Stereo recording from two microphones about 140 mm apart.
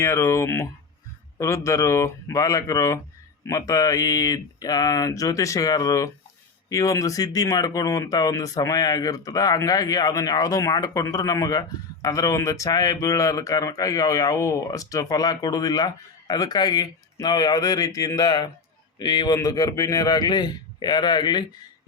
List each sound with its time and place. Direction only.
0.0 s a man's voice: 20° left (ahead or behind)